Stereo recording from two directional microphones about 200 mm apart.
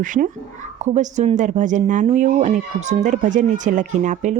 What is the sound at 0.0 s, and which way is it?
Speech, 40° right (ahead or behind).